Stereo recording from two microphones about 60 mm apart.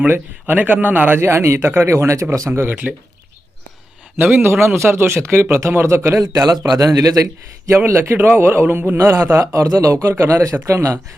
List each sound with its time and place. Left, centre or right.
0.1 s speech: right
1.2 s speech: right
2.5 s speech: right
4.2 s speech: right
6.1 s speech: right
7.9 s speech: right
9.5 s a man's voice: right
10.1 s speech: right
10.7 s a man's voice: right